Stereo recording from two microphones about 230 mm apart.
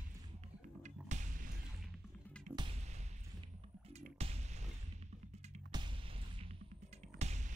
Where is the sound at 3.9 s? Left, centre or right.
Right.